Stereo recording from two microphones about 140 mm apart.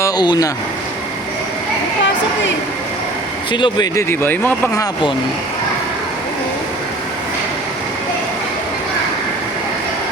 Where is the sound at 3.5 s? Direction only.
35° left (ahead or behind).